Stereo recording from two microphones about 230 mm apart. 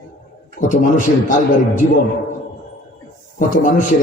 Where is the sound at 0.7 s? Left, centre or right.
Left.